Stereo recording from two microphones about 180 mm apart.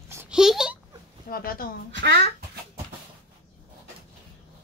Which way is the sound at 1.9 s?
75° right (ahead or behind).